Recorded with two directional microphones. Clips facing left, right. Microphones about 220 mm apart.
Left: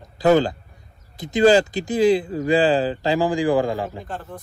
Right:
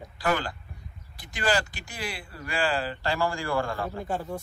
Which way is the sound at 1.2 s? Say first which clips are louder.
Left 13 dB; 20° left (ahead or behind).